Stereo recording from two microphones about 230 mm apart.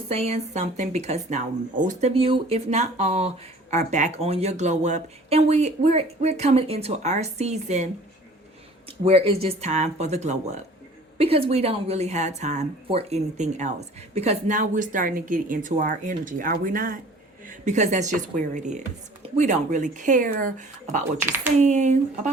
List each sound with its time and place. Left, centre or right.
0.1 s speech: right
8.9 s a woman's voice: right